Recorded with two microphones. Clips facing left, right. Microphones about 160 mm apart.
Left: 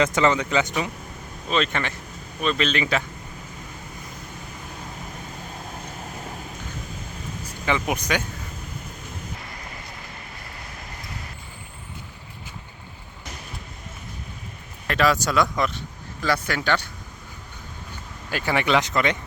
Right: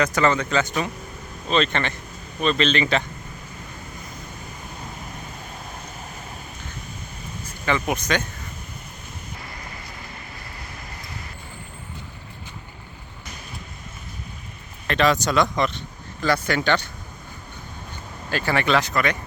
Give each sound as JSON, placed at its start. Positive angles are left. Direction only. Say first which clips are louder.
{"t": 0.0, "sound": "speech", "louder": "even", "side_deg": 20}
{"t": 7.6, "sound": "speech", "louder": "right 1 dB", "side_deg": 15}
{"t": 14.8, "sound": "speech", "louder": "right 1 dB", "side_deg": 5}
{"t": 18.3, "sound": "speech", "louder": "right 1 dB", "side_deg": 15}